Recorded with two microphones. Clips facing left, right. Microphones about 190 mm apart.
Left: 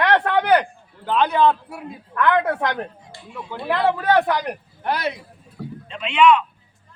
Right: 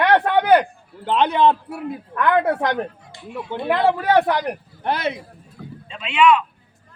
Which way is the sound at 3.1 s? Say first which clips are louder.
Right 5 dB; 20° right (ahead or behind).